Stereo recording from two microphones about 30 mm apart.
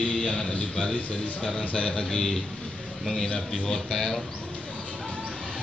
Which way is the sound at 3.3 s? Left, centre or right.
Left.